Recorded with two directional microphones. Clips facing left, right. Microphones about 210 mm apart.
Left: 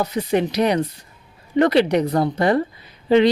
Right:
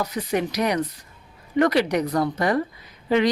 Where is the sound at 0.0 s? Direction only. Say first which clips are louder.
Left 4 dB; 30° left (ahead or behind).